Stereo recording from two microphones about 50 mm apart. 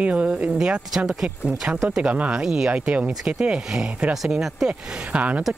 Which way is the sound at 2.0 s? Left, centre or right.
Right.